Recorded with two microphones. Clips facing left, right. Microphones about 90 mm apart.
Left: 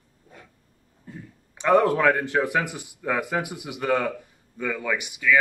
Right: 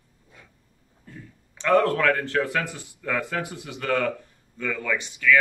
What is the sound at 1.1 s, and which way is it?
A man's voice, 15° left (ahead or behind).